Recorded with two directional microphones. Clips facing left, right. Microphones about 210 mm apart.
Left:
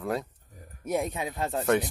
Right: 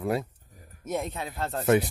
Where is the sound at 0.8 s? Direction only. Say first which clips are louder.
Left 2 dB; 10° left (ahead or behind).